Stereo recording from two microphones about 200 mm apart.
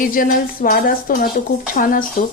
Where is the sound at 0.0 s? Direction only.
45° left (ahead or behind).